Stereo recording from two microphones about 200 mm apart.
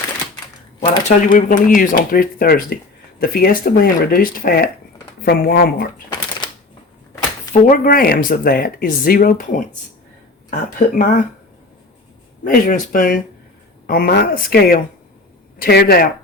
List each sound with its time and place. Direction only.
1.0 s speech: 40° left (ahead or behind)
7.7 s speech: 50° left (ahead or behind)
12.5 s speech: 45° left (ahead or behind)